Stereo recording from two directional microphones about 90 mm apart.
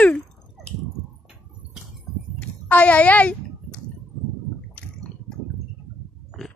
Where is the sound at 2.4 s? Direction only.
15° left (ahead or behind).